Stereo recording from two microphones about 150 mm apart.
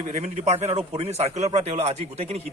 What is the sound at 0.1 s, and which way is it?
A man's voice, 50° right (ahead or behind).